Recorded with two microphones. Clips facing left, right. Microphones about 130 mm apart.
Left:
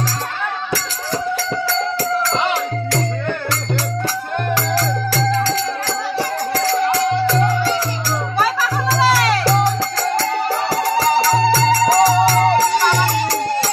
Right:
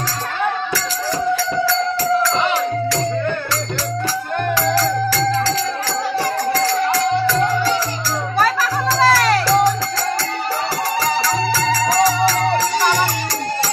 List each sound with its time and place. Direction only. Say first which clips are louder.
9.0 s music: right 1 dB; 5° left (ahead or behind)
11.0 s music: left 5 dB; 30° left (ahead or behind)
11.9 s music: left 2 dB; 45° left (ahead or behind)